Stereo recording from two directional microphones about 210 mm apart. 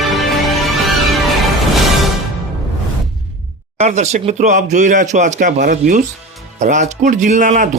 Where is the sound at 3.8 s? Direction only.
35° right (ahead or behind).